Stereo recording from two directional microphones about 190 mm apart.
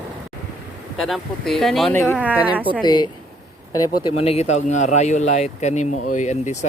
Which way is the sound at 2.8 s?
20° left (ahead or behind).